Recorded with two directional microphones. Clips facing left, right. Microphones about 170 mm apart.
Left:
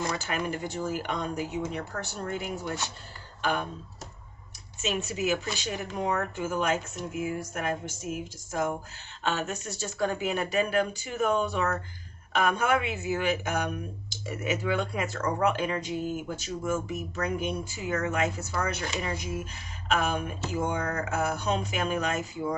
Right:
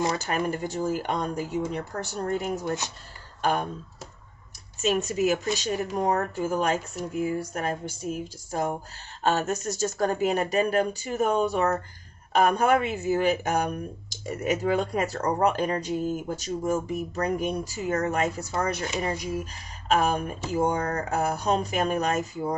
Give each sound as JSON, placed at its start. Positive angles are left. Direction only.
{"t": 0.3, "sound": "speech", "side_deg": -40}
{"t": 4.8, "sound": "speech", "side_deg": -40}